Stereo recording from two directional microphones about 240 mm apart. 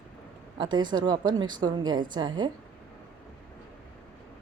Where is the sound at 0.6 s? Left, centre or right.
Centre.